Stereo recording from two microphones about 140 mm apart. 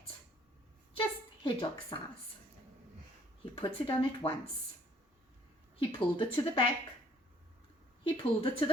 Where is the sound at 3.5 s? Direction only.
40° left (ahead or behind).